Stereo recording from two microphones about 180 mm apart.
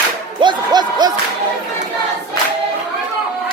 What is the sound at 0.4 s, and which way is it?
Music, 25° right (ahead or behind).